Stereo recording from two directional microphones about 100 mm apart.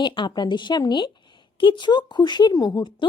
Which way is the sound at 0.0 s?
50° left (ahead or behind).